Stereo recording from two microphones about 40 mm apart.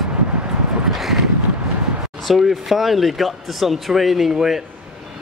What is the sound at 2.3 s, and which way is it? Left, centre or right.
Speech, centre.